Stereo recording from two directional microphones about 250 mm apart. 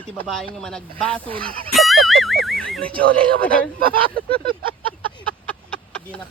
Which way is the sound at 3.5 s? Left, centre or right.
Right.